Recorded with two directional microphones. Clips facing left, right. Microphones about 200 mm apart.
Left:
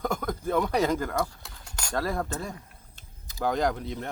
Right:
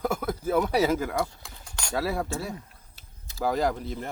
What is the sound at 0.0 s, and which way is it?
Cutlery, 5° right (ahead or behind).